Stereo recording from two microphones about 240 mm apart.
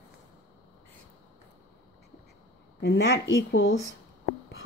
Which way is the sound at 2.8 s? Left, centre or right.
Left.